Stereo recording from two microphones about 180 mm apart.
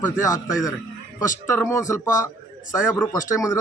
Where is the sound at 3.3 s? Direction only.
15° left (ahead or behind).